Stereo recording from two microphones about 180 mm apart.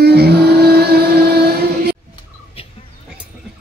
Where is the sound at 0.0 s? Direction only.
60° right (ahead or behind).